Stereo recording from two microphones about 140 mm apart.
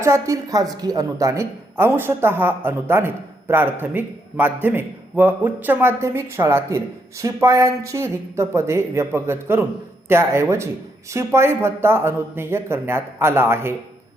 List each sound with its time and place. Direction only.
0.0 s a woman's voice: 20° right (ahead or behind)